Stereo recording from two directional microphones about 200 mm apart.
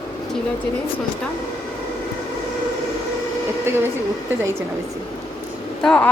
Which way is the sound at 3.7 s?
10° right (ahead or behind).